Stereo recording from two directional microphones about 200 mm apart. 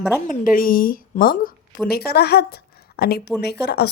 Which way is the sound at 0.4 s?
45° left (ahead or behind).